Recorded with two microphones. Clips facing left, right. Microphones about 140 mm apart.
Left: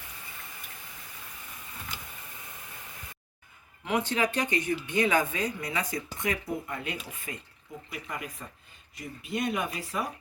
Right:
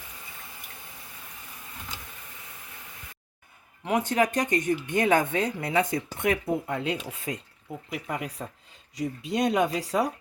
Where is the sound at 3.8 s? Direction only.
40° right (ahead or behind).